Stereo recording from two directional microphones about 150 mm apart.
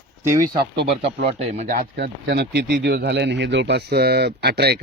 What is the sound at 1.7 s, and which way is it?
Speech, 80° right.